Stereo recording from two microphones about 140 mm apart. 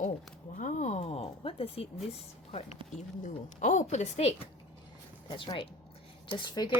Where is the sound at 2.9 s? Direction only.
60° left (ahead or behind).